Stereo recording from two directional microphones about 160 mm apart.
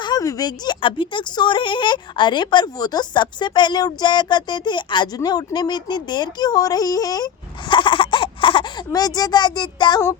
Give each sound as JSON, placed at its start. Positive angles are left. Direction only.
{"t": 0.0, "sound": "speech", "side_deg": 25}